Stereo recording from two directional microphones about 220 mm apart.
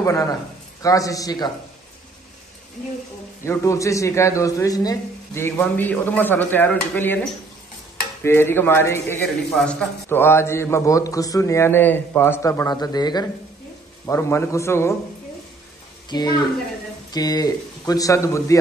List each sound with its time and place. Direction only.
0.0 s a woman's voice: 15° left (ahead or behind)
3.4 s a woman's voice: 15° left (ahead or behind)
16.1 s a woman's voice: 20° left (ahead or behind)